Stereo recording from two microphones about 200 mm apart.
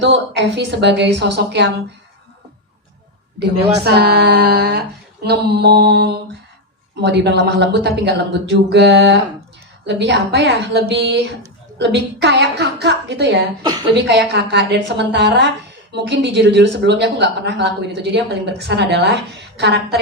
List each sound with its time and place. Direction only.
0.0 s speech: 60° right (ahead or behind)
3.4 s speech: 55° right (ahead or behind)
13.6 s a woman's voice: 20° right (ahead or behind)
13.9 s speech: 60° right (ahead or behind)